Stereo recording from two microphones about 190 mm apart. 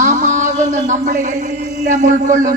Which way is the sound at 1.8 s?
40° right (ahead or behind).